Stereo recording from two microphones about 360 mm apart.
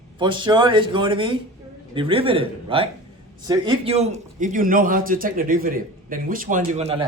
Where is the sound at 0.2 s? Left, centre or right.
Centre.